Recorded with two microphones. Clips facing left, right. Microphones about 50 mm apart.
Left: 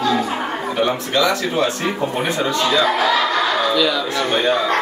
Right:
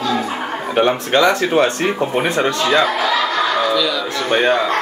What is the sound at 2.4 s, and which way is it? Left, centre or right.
Speech, right.